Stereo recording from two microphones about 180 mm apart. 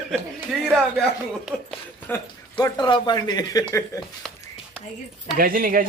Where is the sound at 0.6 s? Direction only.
Centre (ahead or behind).